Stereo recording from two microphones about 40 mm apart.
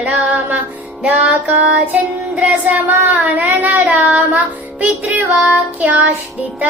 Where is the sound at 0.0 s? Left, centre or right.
Right.